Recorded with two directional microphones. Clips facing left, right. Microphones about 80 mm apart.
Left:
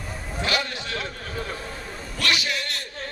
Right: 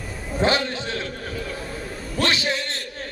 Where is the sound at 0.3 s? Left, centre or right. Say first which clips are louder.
Right 6 dB; right.